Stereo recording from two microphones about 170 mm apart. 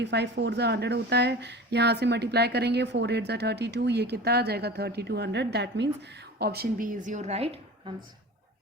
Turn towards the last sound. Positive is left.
turn(degrees=-40)  # may be behind; listen again after turning